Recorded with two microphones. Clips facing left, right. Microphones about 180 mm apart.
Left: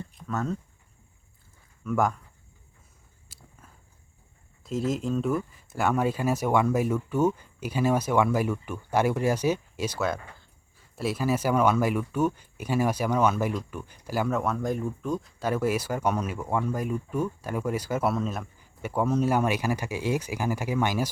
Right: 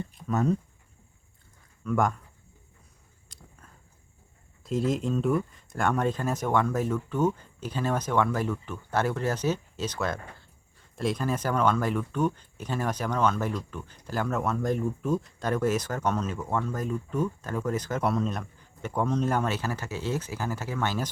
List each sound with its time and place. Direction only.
0.0 s a sound: 15° right (ahead or behind)
1.8 s speech: 5° left (ahead or behind)
3.3 s biting: 5° left (ahead or behind)
4.6 s speech: centre (ahead or behind)
15.4 s speech: 5° left (ahead or behind)